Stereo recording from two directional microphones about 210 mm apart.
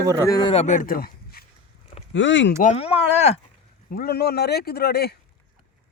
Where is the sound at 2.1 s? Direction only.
60° left (ahead or behind).